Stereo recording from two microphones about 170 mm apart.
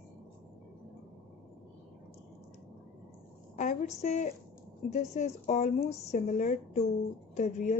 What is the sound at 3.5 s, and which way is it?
A woman's voice, 45° left (ahead or behind).